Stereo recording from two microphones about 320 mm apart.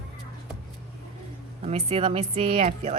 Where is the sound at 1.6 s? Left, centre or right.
Centre.